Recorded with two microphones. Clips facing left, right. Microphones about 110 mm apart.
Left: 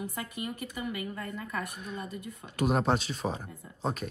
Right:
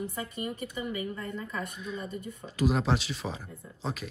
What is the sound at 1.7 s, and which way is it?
Speech, 55° left (ahead or behind).